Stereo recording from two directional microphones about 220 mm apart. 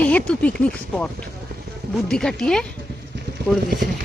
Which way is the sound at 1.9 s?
Centre (ahead or behind).